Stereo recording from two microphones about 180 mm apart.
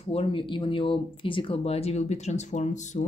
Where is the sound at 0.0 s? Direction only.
30° left (ahead or behind).